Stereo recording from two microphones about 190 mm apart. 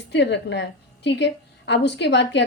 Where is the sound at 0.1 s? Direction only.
65° left (ahead or behind).